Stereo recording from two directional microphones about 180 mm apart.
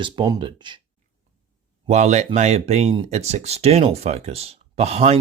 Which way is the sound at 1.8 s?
40° right (ahead or behind).